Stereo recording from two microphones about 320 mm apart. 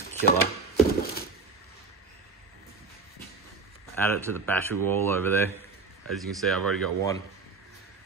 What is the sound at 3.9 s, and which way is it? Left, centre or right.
Speech, centre.